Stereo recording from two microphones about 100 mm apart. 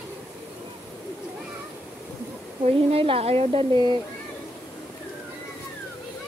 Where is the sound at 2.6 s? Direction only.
70° right (ahead or behind); by 3.6 s 90° right.